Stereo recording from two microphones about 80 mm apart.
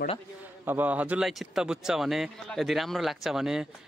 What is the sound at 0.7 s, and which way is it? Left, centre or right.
Speech, right.